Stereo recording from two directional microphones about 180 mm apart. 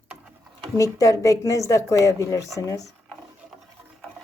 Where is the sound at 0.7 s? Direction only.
20° left (ahead or behind).